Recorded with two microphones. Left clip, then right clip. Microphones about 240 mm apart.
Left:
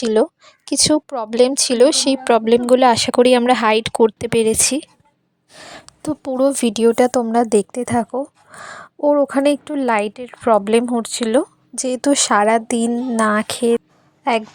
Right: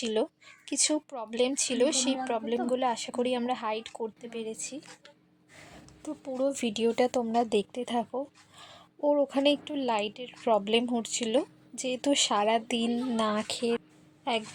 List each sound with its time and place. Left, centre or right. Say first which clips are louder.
0.0 s speech: left 14 dB; left
5.5 s a sound: left 14 dB; left
6.0 s a woman's voice: left 14 dB; left